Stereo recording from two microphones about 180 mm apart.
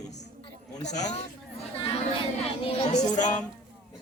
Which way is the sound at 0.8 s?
40° left (ahead or behind).